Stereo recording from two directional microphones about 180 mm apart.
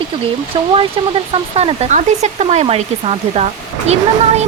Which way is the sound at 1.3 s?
35° right (ahead or behind).